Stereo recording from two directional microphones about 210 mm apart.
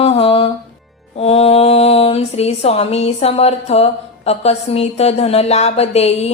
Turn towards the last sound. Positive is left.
turn(degrees=30)  # may be behind; listen again after turning